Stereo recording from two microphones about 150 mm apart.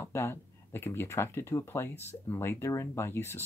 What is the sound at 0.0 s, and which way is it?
Speech, 15° left (ahead or behind).